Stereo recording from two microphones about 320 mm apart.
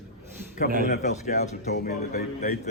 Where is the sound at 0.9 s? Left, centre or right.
Left.